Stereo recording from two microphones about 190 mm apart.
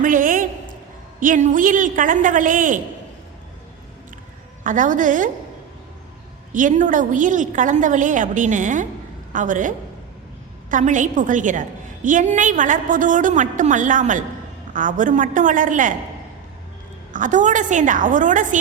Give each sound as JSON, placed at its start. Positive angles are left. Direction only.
{"t": 0.0, "sound": "a sound", "side_deg": -45}
{"t": 1.2, "sound": "a woman's voice", "side_deg": -45}
{"t": 4.6, "sound": "a woman's voice", "side_deg": -40}
{"t": 6.5, "sound": "a woman's voice", "side_deg": -45}
{"t": 17.1, "sound": "a woman's voice", "side_deg": -40}